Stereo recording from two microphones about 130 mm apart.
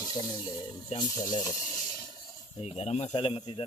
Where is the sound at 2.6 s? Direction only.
55° left (ahead or behind).